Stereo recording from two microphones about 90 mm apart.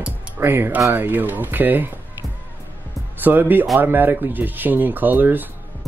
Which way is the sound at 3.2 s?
20° right (ahead or behind).